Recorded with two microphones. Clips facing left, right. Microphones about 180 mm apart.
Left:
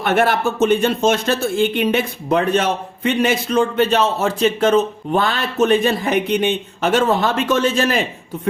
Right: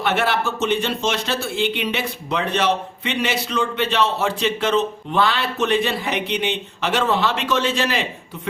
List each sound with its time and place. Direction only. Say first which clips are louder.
0.0 s speech: left 4 dB; 50° left (ahead or behind)